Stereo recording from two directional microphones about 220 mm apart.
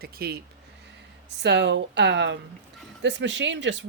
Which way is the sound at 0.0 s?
45° right (ahead or behind).